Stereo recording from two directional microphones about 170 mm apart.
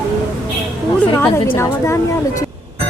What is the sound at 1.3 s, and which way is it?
Speech, 15° left (ahead or behind).